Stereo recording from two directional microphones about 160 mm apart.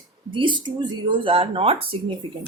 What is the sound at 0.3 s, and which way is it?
A woman's voice, 30° right (ahead or behind).